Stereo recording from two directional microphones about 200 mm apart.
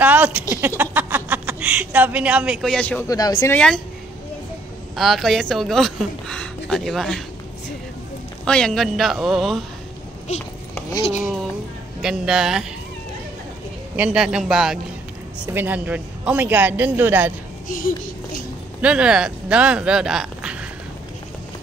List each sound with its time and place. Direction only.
0.0 s a sound: 10° right (ahead or behind)
0.6 s a woman's voice: 10° right (ahead or behind); by 3.1 s 5° left (ahead or behind)
3.1 s speech: 20° left (ahead or behind)
3.5 s speech: 5° left (ahead or behind)
4.9 s speech: centre (ahead or behind)
8.5 s speech: 5° left (ahead or behind)
12.0 s speech: centre (ahead or behind)
13.9 s a woman's voice: 5° right (ahead or behind)
17.6 s a sound: 45° left (ahead or behind)
18.8 s speech: 5° right (ahead or behind)